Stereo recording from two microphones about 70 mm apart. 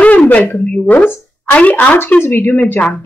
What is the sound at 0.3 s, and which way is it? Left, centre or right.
A woman's voice, left.